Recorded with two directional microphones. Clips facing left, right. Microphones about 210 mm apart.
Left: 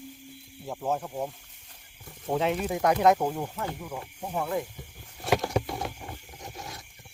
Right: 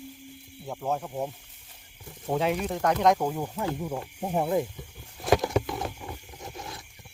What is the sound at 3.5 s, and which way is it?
Speech, 20° right (ahead or behind).